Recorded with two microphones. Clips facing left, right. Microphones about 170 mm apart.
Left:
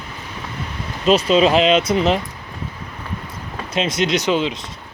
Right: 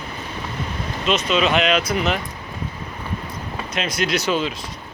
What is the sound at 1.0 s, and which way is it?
Speech, 35° left (ahead or behind).